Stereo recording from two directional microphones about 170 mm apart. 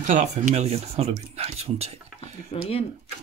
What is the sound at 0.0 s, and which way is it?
Speech, 45° right (ahead or behind).